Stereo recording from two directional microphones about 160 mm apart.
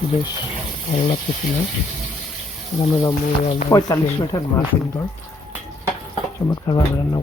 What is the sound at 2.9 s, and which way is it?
Speech, 25° left (ahead or behind).